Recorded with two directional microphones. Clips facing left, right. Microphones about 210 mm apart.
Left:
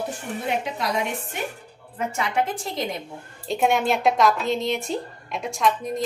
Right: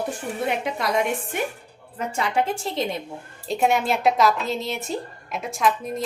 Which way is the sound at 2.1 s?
30° right (ahead or behind).